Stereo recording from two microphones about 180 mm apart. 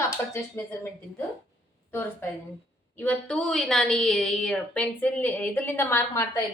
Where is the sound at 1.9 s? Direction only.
10° left (ahead or behind).